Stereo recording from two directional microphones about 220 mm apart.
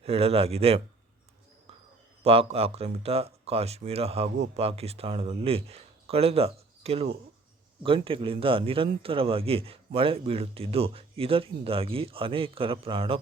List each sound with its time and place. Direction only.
0.0 s a man's voice: 25° right (ahead or behind)
2.2 s a man's voice: 25° right (ahead or behind)